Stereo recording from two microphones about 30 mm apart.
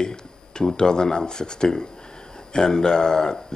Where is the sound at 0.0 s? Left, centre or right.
Left.